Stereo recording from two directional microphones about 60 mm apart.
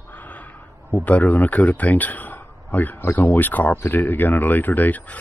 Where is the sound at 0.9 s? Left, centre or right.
Left.